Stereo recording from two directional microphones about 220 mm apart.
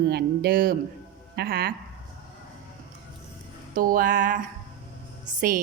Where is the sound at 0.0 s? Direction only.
45° right (ahead or behind).